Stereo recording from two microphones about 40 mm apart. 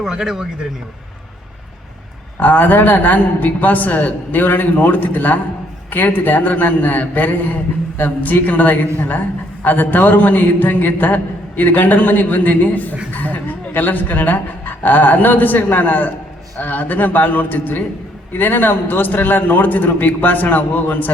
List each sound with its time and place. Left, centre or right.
0.0 s speech: centre
2.4 s a man's voice: left